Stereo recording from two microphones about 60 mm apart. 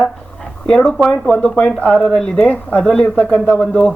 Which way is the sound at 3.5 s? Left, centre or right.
Centre.